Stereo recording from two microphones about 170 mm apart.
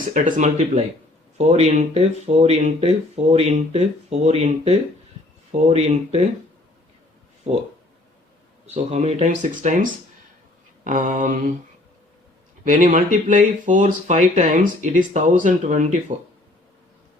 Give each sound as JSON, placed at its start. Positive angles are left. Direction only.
{"t": 0.1, "sound": "speech", "side_deg": -45}
{"t": 7.5, "sound": "speech", "side_deg": -40}
{"t": 8.6, "sound": "speech", "side_deg": -40}
{"t": 12.6, "sound": "speech", "side_deg": -50}